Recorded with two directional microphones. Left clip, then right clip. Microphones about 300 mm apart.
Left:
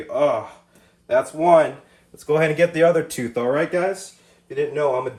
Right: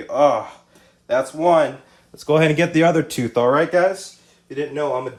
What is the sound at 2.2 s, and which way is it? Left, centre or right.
Speech, centre.